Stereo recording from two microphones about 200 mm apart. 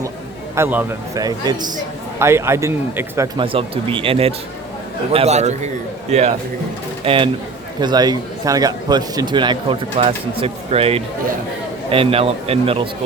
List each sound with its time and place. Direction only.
0.5 s speech: 10° right (ahead or behind)
3.3 s a man's voice: 25° right (ahead or behind)